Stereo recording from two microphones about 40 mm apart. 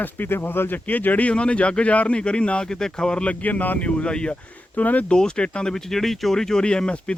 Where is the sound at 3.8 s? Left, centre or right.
Left.